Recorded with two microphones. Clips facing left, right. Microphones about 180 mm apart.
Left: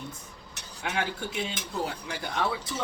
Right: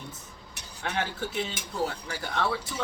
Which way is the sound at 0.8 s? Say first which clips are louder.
Even; 15° left (ahead or behind).